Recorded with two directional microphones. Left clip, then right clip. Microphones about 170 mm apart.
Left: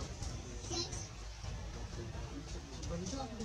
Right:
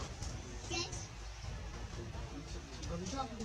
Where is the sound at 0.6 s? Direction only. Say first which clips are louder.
Right 1 dB; centre (ahead or behind).